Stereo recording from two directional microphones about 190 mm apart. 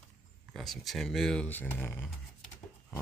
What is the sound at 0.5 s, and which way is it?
Speech, centre (ahead or behind).